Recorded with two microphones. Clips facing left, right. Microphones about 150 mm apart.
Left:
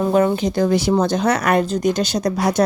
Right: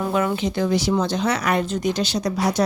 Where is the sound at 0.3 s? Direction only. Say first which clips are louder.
Left 4 dB; 45° left (ahead or behind).